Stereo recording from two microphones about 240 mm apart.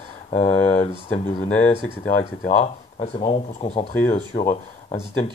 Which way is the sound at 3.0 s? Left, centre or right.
Left.